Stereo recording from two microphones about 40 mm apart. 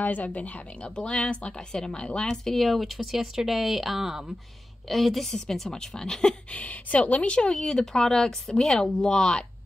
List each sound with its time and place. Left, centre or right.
0.0 s a woman's voice: left
1.7 s speech: centre
2.2 s speech: centre
4.8 s speech: centre
5.3 s a woman's voice: centre
6.5 s a woman's voice: left
7.3 s speech: left